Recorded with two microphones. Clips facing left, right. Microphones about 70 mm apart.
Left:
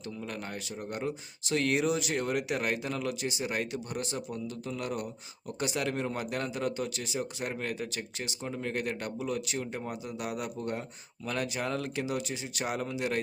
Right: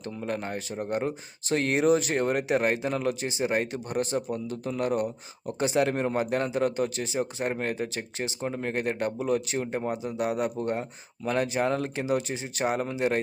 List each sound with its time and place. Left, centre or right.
0.2 s speech: right
5.5 s speech: right